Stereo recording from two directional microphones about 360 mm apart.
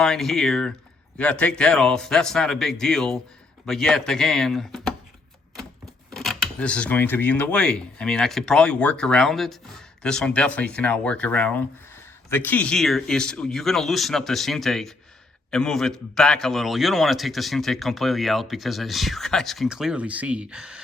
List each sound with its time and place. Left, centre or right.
0.0 s a man's voice: centre